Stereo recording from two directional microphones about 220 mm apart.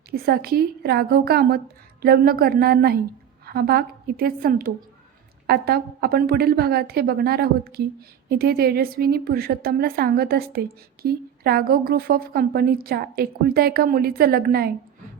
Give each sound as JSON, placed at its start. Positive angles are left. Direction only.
{"t": 0.1, "sound": "a woman's voice", "side_deg": -45}